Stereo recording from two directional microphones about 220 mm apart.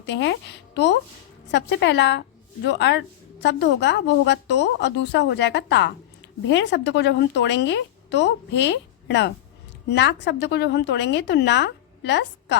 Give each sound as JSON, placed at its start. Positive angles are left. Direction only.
{"t": 0.0, "sound": "a woman's voice", "side_deg": 55}